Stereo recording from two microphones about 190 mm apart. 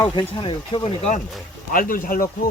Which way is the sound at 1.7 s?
50° left (ahead or behind).